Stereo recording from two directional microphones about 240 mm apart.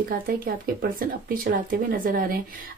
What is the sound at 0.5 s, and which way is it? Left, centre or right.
Speech, right.